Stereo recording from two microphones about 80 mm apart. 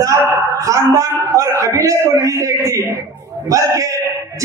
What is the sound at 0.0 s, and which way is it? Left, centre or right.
Speech, right.